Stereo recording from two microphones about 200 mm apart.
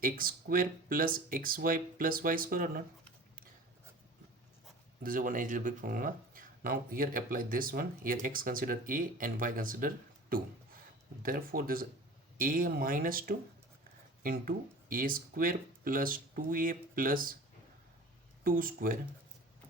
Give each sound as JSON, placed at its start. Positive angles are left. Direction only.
{"t": 0.0, "sound": "speech", "side_deg": -45}
{"t": 5.0, "sound": "speech", "side_deg": -45}
{"t": 18.4, "sound": "speech", "side_deg": -45}